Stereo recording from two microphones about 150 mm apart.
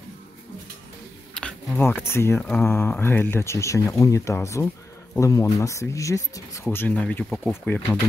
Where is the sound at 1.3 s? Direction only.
10° left (ahead or behind).